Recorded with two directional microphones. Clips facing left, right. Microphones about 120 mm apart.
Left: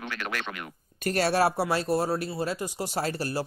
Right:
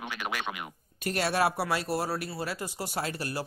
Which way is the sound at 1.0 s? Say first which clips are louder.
Left 3 dB; 40° left (ahead or behind).